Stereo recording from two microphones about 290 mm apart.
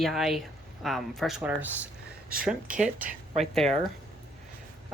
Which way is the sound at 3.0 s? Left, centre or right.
Right.